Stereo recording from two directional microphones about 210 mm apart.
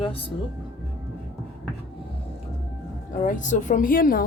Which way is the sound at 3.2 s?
35° left (ahead or behind).